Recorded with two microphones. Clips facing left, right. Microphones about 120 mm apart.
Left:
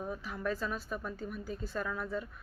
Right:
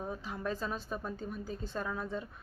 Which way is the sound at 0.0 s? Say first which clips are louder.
Left 1 dB; 25° right (ahead or behind).